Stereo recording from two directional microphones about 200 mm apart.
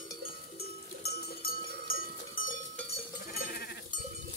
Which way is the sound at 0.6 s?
50° left (ahead or behind).